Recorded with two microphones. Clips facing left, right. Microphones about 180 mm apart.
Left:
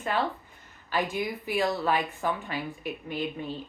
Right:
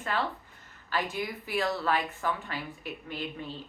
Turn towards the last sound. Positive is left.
turn(degrees=15)  # may be behind; listen again after turning